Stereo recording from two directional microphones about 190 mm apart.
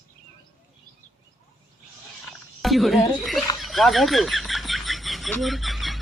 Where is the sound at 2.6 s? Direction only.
Centre (ahead or behind).